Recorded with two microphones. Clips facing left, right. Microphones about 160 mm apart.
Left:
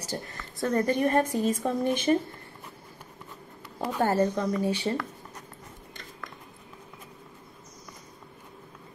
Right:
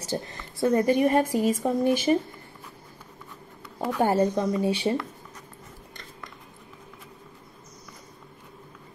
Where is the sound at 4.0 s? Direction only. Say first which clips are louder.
Right 2 dB; 15° right (ahead or behind).